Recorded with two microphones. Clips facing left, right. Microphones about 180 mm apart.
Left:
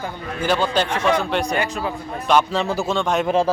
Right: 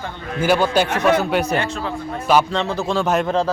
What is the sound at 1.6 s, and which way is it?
Speech, 10° left (ahead or behind).